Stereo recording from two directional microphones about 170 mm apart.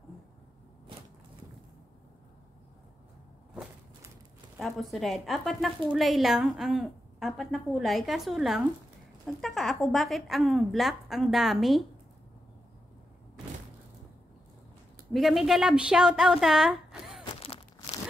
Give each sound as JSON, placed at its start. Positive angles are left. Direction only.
{"t": 4.6, "sound": "a woman's voice", "side_deg": 0}
{"t": 15.1, "sound": "a woman's voice", "side_deg": 0}
{"t": 17.2, "sound": "a sound", "side_deg": 30}